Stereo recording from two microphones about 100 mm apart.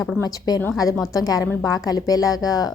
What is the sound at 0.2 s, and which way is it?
A woman's voice, 40° left (ahead or behind).